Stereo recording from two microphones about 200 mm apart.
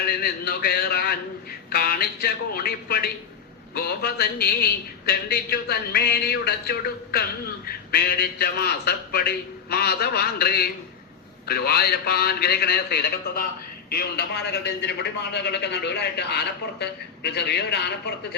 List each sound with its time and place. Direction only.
0.0 s a man's voice: 50° left (ahead or behind)